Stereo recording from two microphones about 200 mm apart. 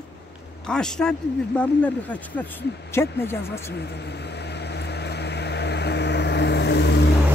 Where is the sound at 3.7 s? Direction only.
55° left (ahead or behind).